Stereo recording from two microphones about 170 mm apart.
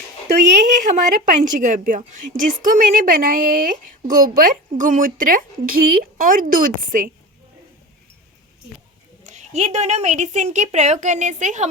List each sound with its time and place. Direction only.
0.8 s a woman's voice: 45° right (ahead or behind)
9.2 s a woman's voice: 45° right (ahead or behind)